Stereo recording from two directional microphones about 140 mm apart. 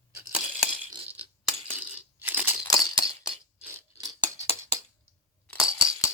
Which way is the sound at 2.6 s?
25° left (ahead or behind).